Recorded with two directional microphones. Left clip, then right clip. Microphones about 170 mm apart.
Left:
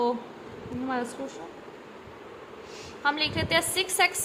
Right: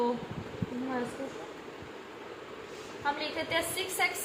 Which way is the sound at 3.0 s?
40° left (ahead or behind).